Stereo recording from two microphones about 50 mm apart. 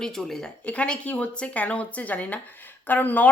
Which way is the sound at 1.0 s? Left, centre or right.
Left.